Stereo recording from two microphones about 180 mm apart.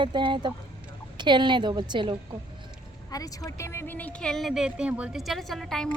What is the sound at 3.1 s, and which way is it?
A woman's voice, 20° left (ahead or behind).